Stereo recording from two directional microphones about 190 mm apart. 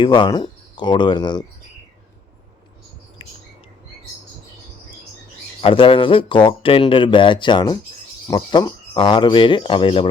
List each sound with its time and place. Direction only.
0.0 s speech: 25° left (ahead or behind)
5.6 s speech: 25° left (ahead or behind)